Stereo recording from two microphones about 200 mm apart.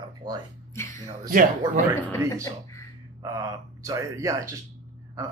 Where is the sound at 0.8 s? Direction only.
15° left (ahead or behind).